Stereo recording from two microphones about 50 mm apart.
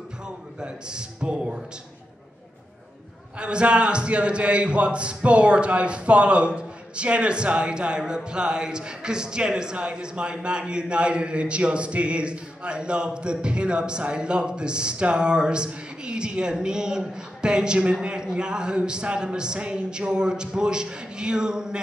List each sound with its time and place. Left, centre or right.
0.6 s a man's voice: centre
3.3 s a man's voice: right